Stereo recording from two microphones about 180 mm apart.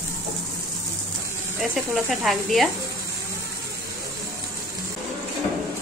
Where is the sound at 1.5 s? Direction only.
Centre (ahead or behind).